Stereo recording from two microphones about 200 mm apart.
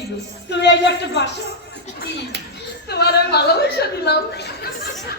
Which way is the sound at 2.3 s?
60° right (ahead or behind).